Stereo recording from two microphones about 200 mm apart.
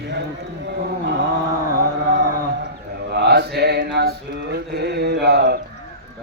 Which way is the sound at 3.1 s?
55° right (ahead or behind).